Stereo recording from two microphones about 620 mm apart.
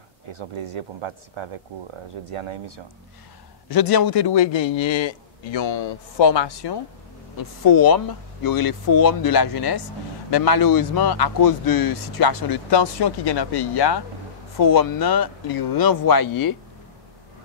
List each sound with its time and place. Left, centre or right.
0.3 s speech: right
3.6 s speech: left